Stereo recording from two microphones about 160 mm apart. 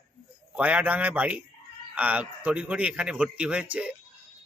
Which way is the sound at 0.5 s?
10° right (ahead or behind).